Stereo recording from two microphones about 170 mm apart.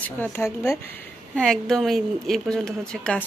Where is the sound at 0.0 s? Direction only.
15° left (ahead or behind).